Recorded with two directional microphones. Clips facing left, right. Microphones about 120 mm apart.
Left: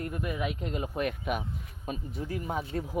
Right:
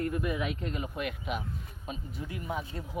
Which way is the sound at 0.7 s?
35° left (ahead or behind).